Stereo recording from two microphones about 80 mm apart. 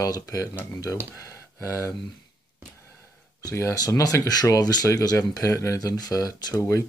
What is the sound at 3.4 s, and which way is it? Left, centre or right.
Speech, left.